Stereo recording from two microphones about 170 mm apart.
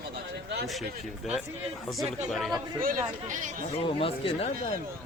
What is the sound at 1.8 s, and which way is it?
Speech, centre (ahead or behind).